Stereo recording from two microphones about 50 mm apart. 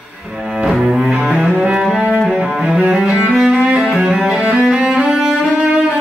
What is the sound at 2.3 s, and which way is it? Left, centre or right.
Cello, centre.